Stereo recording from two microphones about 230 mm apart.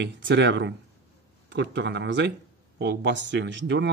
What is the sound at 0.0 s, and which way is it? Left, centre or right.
A man's voice, right.